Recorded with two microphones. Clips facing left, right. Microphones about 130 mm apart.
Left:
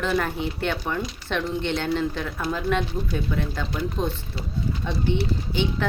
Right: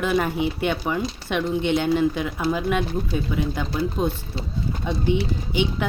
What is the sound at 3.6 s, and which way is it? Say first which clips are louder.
A woman's voice: right 3 dB; 15° right (ahead or behind).